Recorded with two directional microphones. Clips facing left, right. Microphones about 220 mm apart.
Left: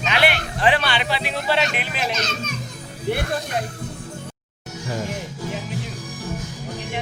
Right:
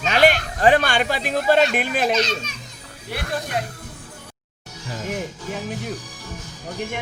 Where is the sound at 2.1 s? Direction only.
50° left (ahead or behind).